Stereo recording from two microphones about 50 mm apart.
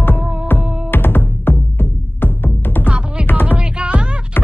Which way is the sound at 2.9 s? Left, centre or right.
Right.